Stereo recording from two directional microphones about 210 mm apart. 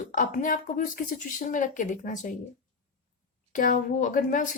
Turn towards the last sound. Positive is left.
turn(degrees=40)  # may be behind; listen again after turning